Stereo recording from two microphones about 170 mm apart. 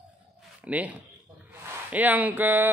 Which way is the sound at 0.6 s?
10° right (ahead or behind).